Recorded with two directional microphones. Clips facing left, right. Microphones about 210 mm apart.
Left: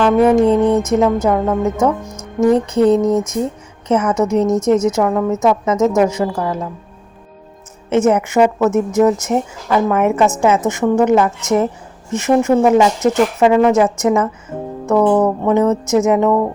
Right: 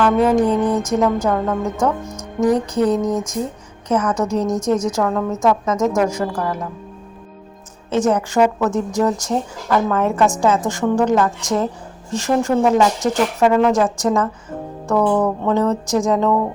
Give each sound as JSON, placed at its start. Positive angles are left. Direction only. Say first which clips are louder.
{"t": 0.0, "sound": "a woman's voice", "louder": "left 4 dB", "side_deg": 25}
{"t": 7.9, "sound": "a woman's voice", "louder": "left 4 dB", "side_deg": 25}